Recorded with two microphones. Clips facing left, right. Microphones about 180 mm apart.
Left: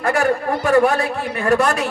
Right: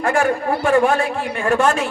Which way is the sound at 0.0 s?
40° left (ahead or behind).